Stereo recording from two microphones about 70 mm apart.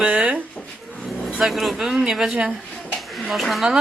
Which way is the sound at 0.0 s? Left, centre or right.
Centre.